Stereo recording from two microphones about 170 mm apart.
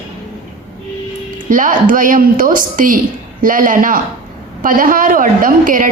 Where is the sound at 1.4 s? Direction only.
50° right (ahead or behind).